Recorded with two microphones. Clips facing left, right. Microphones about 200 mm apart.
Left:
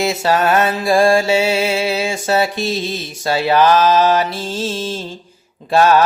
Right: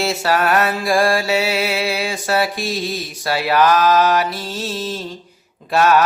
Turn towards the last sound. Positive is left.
turn(degrees=30)  # may be behind; listen again after turning